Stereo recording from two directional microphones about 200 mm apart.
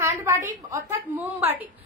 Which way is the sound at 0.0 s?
10° right (ahead or behind).